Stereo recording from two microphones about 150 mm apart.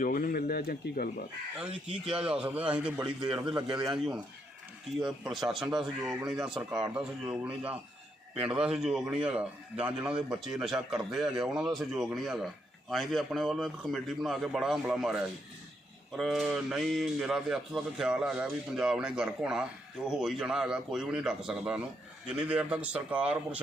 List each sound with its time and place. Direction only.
0.0 s speech: 70° left (ahead or behind); by 1.1 s 90° left
2.2 s a man's voice: 5° right (ahead or behind)